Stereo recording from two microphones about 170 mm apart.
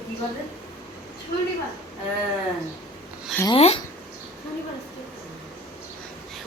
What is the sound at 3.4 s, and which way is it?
Speech, 35° left (ahead or behind).